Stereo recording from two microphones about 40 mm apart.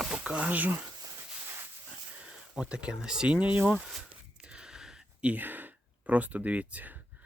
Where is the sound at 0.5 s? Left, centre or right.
Right.